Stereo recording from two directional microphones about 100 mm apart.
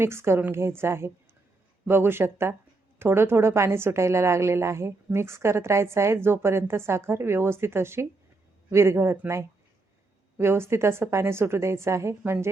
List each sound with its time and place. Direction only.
0.0 s a woman's voice: 25° right (ahead or behind)